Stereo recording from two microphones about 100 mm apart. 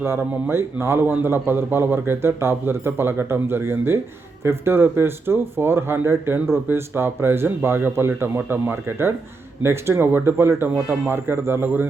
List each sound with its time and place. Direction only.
0.0 s a man's voice: 25° right (ahead or behind)